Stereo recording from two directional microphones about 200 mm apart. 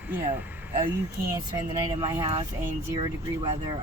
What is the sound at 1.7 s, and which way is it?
Speech, 25° right (ahead or behind).